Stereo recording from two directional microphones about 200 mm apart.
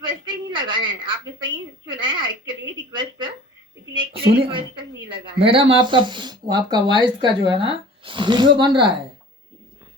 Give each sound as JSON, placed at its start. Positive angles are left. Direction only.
{"t": 0.0, "sound": "a sound", "side_deg": -25}
{"t": 1.9, "sound": "a woman's voice", "side_deg": -25}
{"t": 3.9, "sound": "a woman's voice", "side_deg": -25}